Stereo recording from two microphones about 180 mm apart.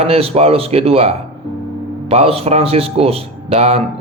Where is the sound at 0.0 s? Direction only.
35° right (ahead or behind).